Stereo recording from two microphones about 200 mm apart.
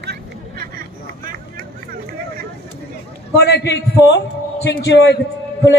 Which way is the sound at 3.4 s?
60° left (ahead or behind).